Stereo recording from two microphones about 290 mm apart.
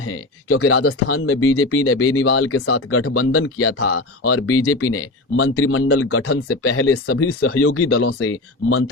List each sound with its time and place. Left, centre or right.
0.0 s speech: left